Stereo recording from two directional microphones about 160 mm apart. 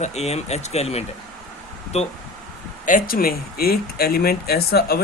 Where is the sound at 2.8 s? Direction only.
60° left (ahead or behind).